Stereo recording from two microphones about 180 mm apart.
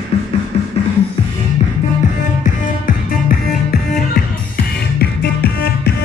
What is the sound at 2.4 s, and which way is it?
Music, 50° left (ahead or behind).